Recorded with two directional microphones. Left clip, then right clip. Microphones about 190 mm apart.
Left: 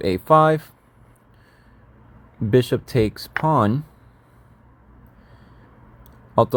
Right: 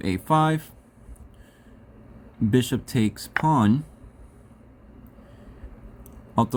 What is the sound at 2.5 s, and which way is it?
Speech, 10° left (ahead or behind).